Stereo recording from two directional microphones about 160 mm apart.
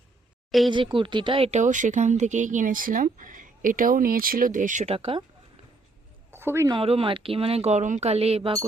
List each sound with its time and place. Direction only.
0.7 s speech: 30° right (ahead or behind); by 4.9 s 50° right (ahead or behind)
4.9 s speech: 35° right (ahead or behind)
6.3 s a woman's voice: 15° right (ahead or behind)
6.7 s speech: 35° right (ahead or behind)